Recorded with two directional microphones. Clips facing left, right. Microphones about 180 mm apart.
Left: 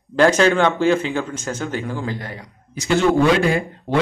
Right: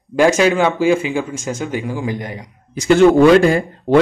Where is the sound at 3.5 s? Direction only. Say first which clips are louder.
Right 4 dB; 45° right (ahead or behind).